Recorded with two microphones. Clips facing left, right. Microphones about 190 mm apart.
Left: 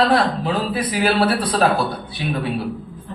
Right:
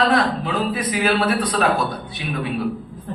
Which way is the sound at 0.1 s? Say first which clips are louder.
Left 1 dB; 35° left (ahead or behind).